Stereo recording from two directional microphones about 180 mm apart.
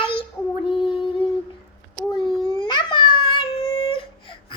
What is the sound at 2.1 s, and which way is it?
Babbling, 30° left (ahead or behind).